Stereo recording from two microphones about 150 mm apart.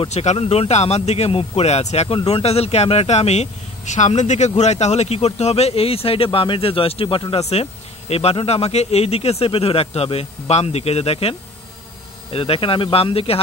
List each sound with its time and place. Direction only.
0.0 s speech: 50° left (ahead or behind)